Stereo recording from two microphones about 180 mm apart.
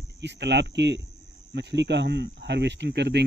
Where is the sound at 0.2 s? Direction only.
75° right (ahead or behind).